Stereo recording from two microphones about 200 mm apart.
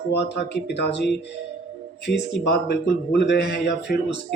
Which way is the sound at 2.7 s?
60° left (ahead or behind).